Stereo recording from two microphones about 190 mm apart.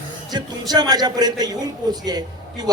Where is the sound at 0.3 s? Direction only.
20° right (ahead or behind).